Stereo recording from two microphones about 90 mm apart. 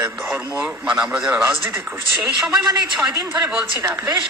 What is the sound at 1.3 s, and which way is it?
Speech, 25° right (ahead or behind).